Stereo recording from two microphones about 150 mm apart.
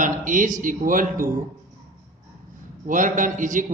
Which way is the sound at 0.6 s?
65° right (ahead or behind).